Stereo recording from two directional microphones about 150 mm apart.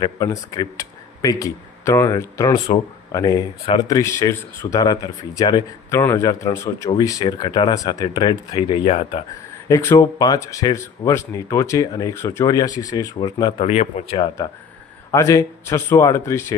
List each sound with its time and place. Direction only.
0.0 s speech: 25° left (ahead or behind); by 9.2 s 45° left (ahead or behind)
9.6 s speech: 20° left (ahead or behind)
13.7 s speech: 45° left (ahead or behind)
15.1 s speech: 20° left (ahead or behind)